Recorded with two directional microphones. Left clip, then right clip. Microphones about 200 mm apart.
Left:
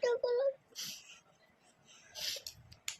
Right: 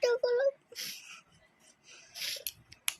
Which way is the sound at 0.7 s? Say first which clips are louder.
Right 3 dB; 15° left (ahead or behind).